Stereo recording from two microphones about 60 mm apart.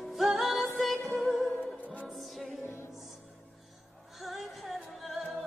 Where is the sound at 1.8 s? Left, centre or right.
Left.